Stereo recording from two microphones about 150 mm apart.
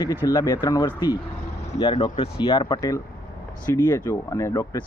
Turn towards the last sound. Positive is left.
turn(degrees=20)  # may be behind; listen again after turning